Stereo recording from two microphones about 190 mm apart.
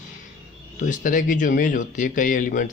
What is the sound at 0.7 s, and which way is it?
Speech, 45° left (ahead or behind).